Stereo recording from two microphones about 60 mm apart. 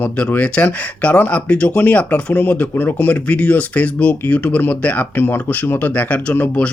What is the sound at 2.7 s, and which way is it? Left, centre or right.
Speech, left.